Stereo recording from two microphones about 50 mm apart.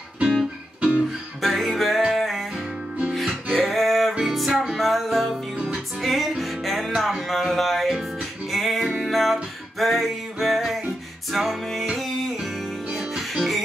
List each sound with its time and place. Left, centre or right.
0.7 s guitar: right
1.4 s music: centre
3.5 s a sound: centre
4.2 s music: centre